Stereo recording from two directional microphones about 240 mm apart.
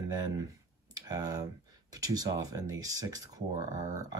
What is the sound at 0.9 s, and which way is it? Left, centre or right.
Speech, centre.